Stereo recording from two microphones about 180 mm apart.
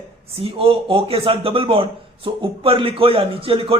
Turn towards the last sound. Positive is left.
turn(degrees=-30)  # may be behind; listen again after turning